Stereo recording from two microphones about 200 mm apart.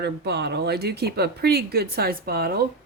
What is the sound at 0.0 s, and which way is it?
A woman's voice, 55° right (ahead or behind).